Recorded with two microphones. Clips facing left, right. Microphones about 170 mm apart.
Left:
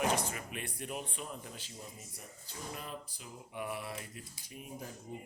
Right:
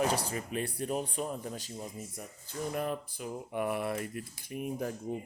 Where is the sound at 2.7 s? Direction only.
55° right (ahead or behind).